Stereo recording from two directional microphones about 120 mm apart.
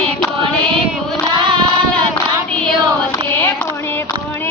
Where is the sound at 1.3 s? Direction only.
40° right (ahead or behind).